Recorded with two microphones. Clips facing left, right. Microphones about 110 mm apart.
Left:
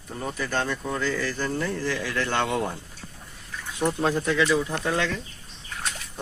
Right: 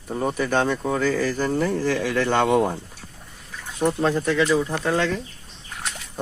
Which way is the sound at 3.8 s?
5° right (ahead or behind).